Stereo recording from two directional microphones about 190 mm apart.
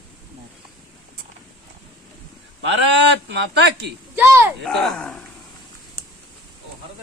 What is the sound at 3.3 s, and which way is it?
Speech, 65° right (ahead or behind).